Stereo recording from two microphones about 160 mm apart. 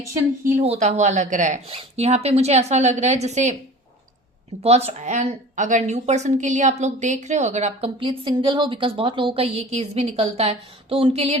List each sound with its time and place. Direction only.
0.0 s speech: 20° right (ahead or behind)
0.5 s a woman's voice: 45° right (ahead or behind)
4.6 s a woman's voice: 40° right (ahead or behind)